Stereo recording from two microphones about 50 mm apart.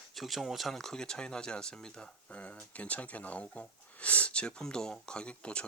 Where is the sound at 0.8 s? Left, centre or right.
Centre.